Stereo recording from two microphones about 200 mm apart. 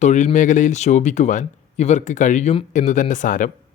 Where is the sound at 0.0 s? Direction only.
35° left (ahead or behind).